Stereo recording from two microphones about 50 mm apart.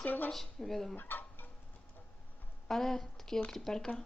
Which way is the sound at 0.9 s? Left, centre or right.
Left.